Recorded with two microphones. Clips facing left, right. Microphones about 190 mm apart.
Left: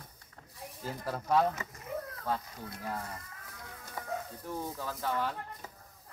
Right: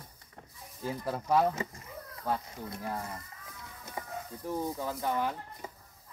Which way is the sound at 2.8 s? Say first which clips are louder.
Right 1 dB; 15° right (ahead or behind).